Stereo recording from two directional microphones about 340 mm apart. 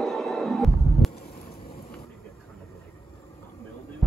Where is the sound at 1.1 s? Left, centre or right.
Centre.